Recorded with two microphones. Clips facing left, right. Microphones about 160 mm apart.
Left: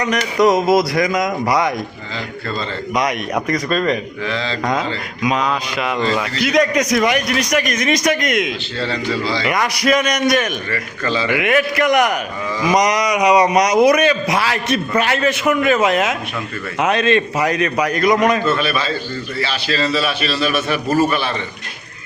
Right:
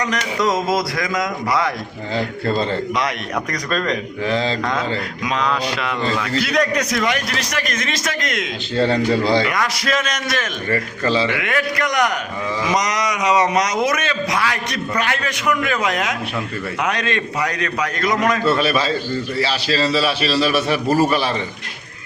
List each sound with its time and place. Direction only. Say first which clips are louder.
0.0 s a man's voice: left 5 dB; 20° left (ahead or behind)
2.9 s a man's voice: left 3 dB; 15° left (ahead or behind)
4.3 s a man's voice: right 4 dB; 40° right (ahead or behind)
5.2 s a man's voice: left 3 dB; 10° left (ahead or behind)
9.0 s speech: right 4 dB; 55° right (ahead or behind)
9.5 s a man's voice: left 4 dB; 20° left (ahead or behind)
10.7 s a man's voice: right 2 dB; 30° right (ahead or behind)
11.3 s a man's voice: left 5 dB; 20° left (ahead or behind)
18.4 s a man's voice: right 1 dB; 35° right (ahead or behind)